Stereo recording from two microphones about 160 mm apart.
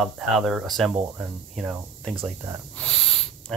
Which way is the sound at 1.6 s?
10° right (ahead or behind).